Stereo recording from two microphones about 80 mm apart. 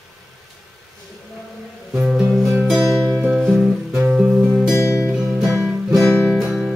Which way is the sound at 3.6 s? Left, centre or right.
Right.